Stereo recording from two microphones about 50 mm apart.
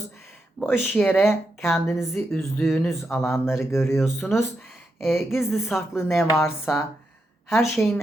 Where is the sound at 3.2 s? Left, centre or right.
Left.